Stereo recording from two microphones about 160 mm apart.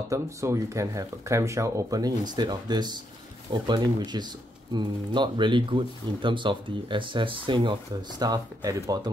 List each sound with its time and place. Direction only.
0.1 s speech: 20° right (ahead or behind)